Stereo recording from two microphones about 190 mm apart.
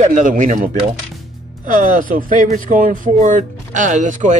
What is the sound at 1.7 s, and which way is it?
Speech, 45° right (ahead or behind).